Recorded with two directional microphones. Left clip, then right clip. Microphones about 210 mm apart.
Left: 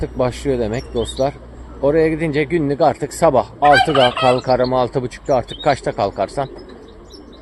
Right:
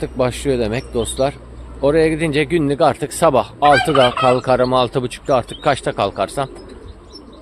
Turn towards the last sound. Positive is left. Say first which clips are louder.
# even
turn(degrees=-5)  # may be behind; listen again after turning